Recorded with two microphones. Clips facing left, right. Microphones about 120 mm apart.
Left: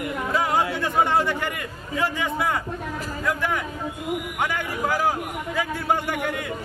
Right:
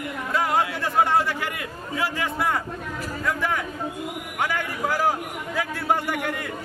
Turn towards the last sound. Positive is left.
turn(degrees=0)  # may be behind; listen again after turning